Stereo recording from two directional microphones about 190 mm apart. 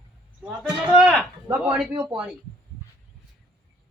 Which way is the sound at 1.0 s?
5° right (ahead or behind).